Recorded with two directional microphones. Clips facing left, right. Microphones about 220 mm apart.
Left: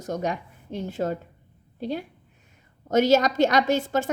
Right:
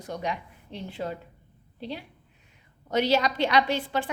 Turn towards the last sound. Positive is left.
turn(degrees=45)  # may be behind; listen again after turning